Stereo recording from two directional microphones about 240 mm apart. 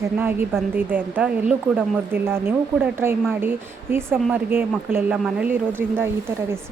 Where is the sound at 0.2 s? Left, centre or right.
Centre.